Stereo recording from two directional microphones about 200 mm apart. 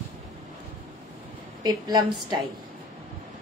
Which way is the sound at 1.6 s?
20° right (ahead or behind).